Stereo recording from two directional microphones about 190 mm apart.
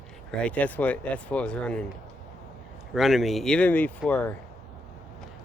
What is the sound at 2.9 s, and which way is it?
Speech, centre (ahead or behind).